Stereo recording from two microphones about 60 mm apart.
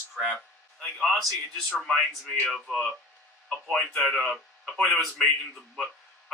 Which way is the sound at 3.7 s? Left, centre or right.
Centre.